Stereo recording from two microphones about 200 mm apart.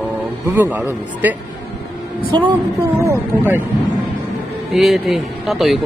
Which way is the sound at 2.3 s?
20° right (ahead or behind).